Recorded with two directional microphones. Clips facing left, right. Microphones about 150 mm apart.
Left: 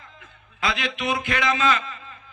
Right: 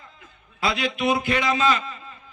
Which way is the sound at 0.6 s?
35° right (ahead or behind).